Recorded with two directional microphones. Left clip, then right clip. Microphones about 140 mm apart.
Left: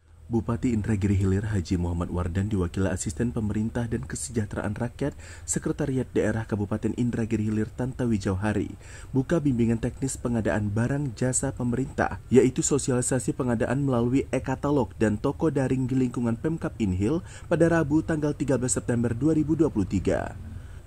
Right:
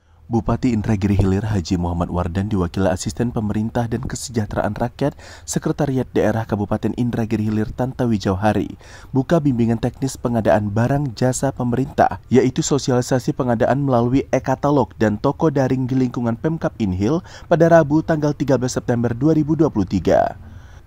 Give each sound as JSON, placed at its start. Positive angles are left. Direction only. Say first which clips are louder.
{"t": 0.3, "sound": "speech", "louder": "right 7 dB", "side_deg": -35}
{"t": 12.3, "sound": "speech", "louder": "right 4 dB", "side_deg": -30}